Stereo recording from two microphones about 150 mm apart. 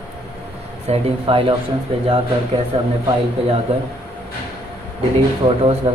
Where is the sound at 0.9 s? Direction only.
35° right (ahead or behind).